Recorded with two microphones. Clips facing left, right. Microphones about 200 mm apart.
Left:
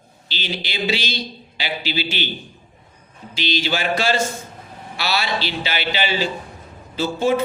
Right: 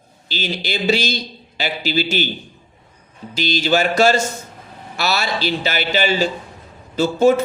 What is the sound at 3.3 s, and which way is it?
A man's voice, 45° right (ahead or behind).